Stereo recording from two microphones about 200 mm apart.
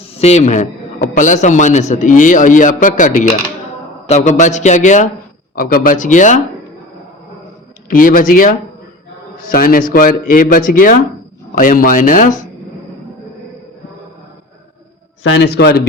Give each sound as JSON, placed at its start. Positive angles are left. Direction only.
{"t": 0.1, "sound": "a sound", "side_deg": 30}
{"t": 1.1, "sound": "a man's voice", "side_deg": 40}
{"t": 7.9, "sound": "speech", "side_deg": 45}
{"t": 15.2, "sound": "a man's voice", "side_deg": 70}
{"t": 15.5, "sound": "speech", "side_deg": 55}